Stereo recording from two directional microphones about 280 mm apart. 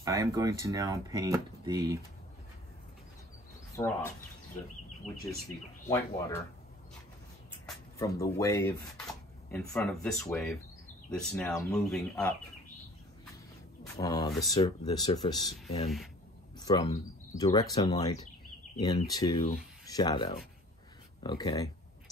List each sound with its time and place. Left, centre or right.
0.0 s speech: centre
3.7 s speech: centre
5.9 s speech: centre
8.0 s speech: centre
13.8 s speech: centre
16.5 s speech: centre